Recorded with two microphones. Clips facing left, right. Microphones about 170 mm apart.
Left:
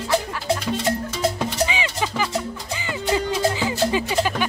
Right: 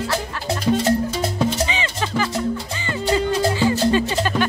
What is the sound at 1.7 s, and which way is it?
Music, 10° left (ahead or behind).